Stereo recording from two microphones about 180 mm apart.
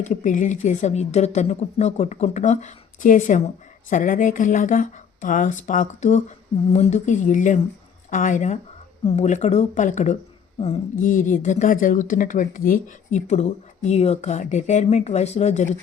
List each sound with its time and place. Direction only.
0.0 s a woman's voice: 40° left (ahead or behind)
11.1 s speech: 45° left (ahead or behind)